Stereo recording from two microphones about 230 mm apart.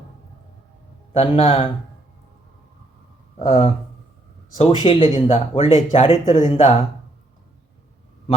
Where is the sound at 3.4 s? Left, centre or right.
Left.